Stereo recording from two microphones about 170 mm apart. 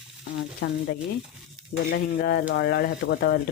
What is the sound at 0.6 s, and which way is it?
Stir, 70° left (ahead or behind).